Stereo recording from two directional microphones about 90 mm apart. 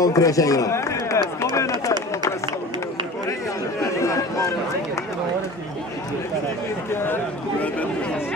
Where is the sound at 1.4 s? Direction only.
35° left (ahead or behind).